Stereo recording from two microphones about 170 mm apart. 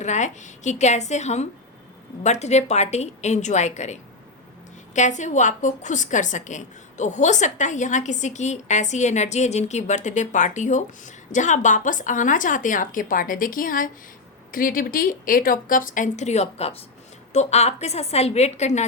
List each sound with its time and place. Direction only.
0.0 s a woman's voice: 45° left (ahead or behind)
4.9 s a woman's voice: 45° left (ahead or behind)